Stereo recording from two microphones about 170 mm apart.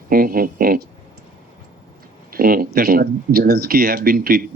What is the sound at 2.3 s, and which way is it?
Speech, 60° right (ahead or behind).